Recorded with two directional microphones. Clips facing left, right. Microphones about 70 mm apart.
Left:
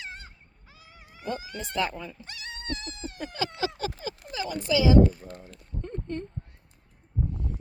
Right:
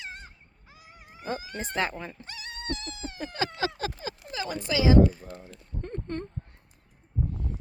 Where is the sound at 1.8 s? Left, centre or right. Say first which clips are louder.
Left 1 dB; right.